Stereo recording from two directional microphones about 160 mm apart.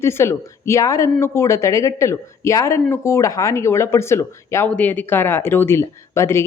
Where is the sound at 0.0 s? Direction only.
15° left (ahead or behind).